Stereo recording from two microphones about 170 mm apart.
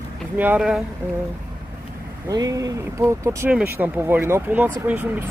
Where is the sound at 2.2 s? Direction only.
20° right (ahead or behind).